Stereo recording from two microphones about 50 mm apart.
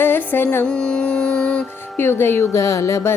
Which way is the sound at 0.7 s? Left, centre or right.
Centre.